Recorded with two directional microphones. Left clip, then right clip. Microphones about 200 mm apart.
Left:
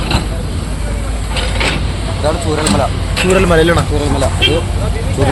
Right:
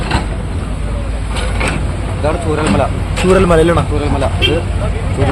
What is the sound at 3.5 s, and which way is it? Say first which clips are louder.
Speech: even; 5° right (ahead or behind).